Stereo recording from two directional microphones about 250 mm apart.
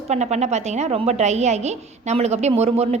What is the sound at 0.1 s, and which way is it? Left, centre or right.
A woman's voice, right.